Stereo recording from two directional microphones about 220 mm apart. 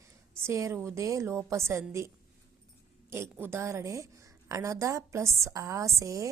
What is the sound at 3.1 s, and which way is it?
A woman's voice, 10° right (ahead or behind).